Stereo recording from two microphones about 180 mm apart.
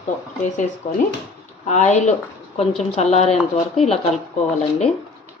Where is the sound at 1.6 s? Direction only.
40° left (ahead or behind).